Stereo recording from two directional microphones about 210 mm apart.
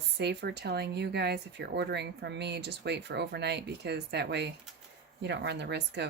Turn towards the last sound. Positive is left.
turn(degrees=-55)  # may be behind; listen again after turning